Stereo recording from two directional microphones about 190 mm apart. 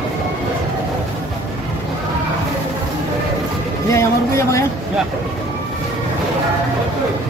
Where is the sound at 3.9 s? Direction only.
15° left (ahead or behind).